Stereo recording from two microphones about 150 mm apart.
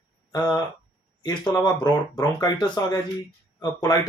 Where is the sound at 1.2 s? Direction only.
25° left (ahead or behind).